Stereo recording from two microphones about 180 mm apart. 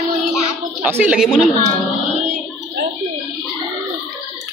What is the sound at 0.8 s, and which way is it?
Speech, 10° right (ahead or behind).